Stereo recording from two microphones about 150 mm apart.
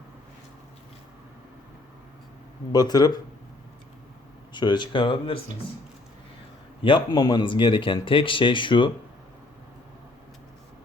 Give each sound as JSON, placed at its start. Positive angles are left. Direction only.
{"t": 2.7, "sound": "speech", "side_deg": 25}
{"t": 4.5, "sound": "speech", "side_deg": 30}
{"t": 6.8, "sound": "speech", "side_deg": 30}